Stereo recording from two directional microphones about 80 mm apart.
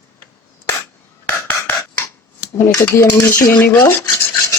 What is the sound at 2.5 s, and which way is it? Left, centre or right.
Cutlery, left.